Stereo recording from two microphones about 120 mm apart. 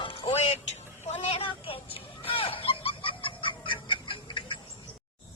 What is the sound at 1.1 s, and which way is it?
Vehicle, 60° left (ahead or behind).